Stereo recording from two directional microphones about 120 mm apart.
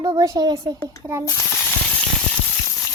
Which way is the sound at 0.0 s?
40° right (ahead or behind).